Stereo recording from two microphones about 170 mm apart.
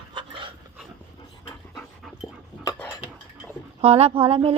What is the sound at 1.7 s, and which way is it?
Dog, centre (ahead or behind).